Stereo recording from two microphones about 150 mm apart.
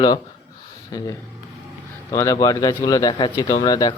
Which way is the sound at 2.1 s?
20° left (ahead or behind).